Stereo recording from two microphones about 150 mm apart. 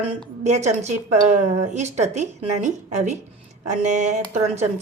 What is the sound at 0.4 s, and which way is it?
A woman's voice, 50° right (ahead or behind).